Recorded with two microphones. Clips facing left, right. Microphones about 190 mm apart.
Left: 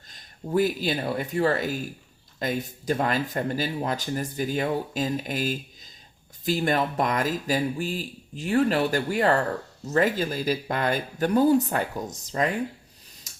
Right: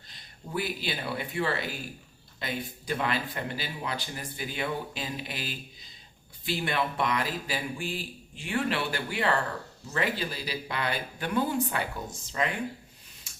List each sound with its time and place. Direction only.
0.1 s speech: 45° left (ahead or behind)
13.3 s tick-tock: 40° left (ahead or behind)